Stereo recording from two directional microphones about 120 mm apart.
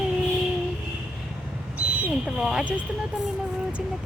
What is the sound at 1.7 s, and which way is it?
Speech, 10° right (ahead or behind).